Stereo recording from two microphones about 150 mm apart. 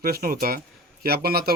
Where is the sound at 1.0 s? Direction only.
90° right.